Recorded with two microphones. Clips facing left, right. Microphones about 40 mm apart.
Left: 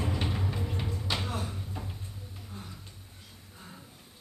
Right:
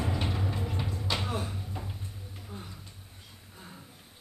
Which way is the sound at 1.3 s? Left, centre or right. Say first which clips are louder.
Right 1 dB; centre.